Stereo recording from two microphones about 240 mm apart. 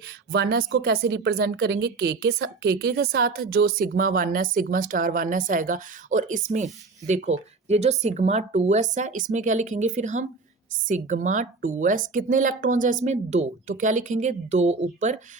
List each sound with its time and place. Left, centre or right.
0.3 s a woman's voice: right